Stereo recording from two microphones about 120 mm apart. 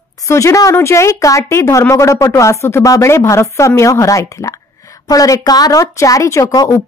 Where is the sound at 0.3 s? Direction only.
25° left (ahead or behind).